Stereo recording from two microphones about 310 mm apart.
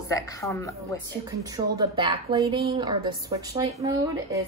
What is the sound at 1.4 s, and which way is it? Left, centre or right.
A woman's voice, centre.